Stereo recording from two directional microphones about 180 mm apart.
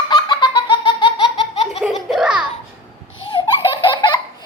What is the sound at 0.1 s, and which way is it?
Laughter, 25° left (ahead or behind).